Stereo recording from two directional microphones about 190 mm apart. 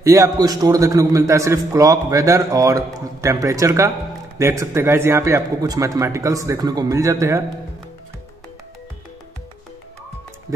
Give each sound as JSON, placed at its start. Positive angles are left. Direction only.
{"t": 0.0, "sound": "a man's voice", "side_deg": -15}